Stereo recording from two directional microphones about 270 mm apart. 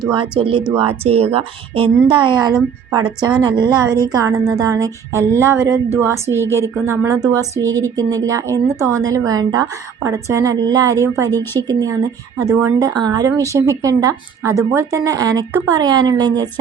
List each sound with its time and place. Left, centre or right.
0.2 s speech: centre
13.0 s speech: centre